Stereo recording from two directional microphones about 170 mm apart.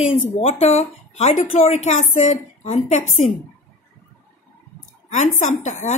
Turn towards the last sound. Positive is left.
turn(degrees=45)  # may be behind; listen again after turning